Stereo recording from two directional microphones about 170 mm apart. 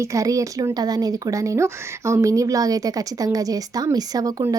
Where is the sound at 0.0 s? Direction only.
20° right (ahead or behind).